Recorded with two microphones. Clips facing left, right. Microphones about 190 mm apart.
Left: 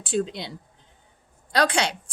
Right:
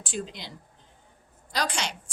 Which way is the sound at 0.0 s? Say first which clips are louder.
Left 9 dB; 65° left (ahead or behind).